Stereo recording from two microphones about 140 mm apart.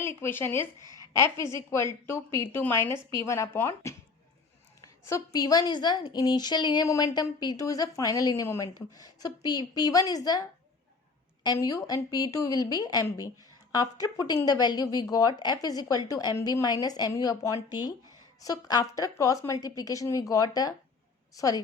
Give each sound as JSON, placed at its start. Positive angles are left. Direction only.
{"t": 0.0, "sound": "speech", "side_deg": 15}
{"t": 0.9, "sound": "a sound", "side_deg": -30}
{"t": 1.1, "sound": "a woman's voice", "side_deg": 20}
{"t": 11.4, "sound": "a woman's voice", "side_deg": 30}